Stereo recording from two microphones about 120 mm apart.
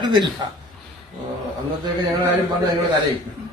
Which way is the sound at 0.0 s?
40° right (ahead or behind).